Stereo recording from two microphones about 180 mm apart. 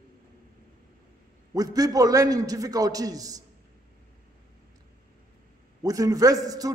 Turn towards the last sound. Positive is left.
turn(degrees=-20)  # may be behind; listen again after turning